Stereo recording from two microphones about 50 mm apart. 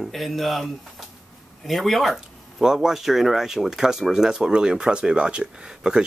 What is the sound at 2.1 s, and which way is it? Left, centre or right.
Speech, centre.